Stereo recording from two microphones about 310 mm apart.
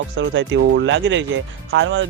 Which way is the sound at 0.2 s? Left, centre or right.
Right.